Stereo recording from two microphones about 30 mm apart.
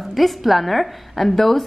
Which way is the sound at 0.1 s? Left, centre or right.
Centre.